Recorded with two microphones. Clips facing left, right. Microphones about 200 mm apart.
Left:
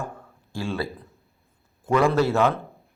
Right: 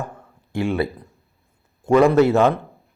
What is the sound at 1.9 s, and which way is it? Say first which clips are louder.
Speech: right 6 dB; 20° right (ahead or behind).